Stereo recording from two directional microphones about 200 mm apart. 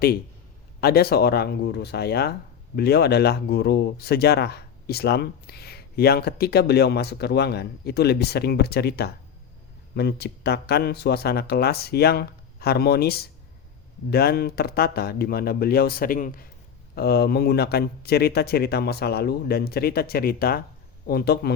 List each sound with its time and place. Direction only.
0.8 s speech: 50° left (ahead or behind)